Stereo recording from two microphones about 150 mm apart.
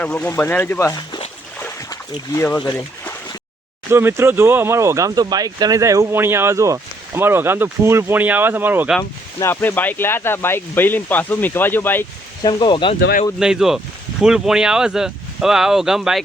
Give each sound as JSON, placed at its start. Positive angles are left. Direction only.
{"t": 0.0, "sound": "speech", "side_deg": 5}
{"t": 3.9, "sound": "speech", "side_deg": -15}
{"t": 9.0, "sound": "speech", "side_deg": 15}
{"t": 12.4, "sound": "speech", "side_deg": 30}
{"t": 13.4, "sound": "speech", "side_deg": -5}